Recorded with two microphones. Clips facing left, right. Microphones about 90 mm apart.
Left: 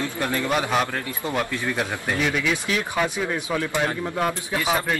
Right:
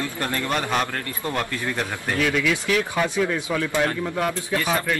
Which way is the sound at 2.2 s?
20° left (ahead or behind).